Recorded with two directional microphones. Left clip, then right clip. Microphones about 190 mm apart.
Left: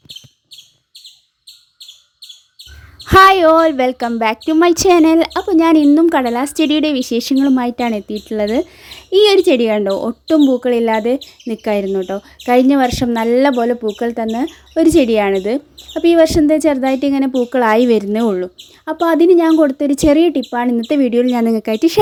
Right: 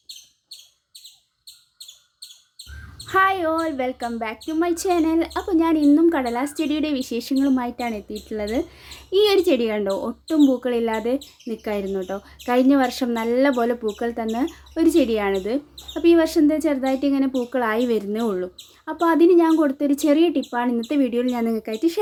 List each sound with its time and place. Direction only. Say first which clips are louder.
3.1 s speech: left 12 dB; 55° left (ahead or behind)